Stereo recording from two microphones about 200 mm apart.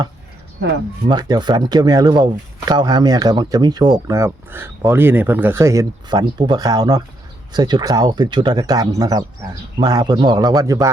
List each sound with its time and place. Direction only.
1.0 s speech: 20° right (ahead or behind)